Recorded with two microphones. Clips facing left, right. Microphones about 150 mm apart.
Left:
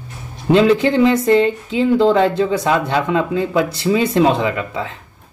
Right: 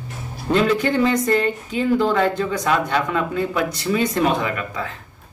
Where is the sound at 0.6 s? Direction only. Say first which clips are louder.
Left 5 dB; 25° left (ahead or behind).